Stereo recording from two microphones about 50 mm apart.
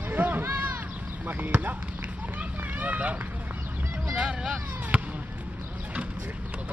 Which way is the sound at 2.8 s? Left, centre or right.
Right.